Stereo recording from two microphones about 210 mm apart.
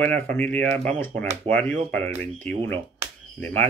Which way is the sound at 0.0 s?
10° left (ahead or behind).